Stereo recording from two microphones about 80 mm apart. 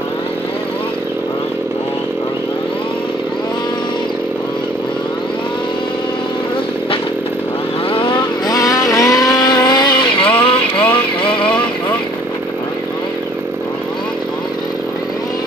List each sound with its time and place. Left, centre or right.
8.5 s vehicle: left
10.8 s music: left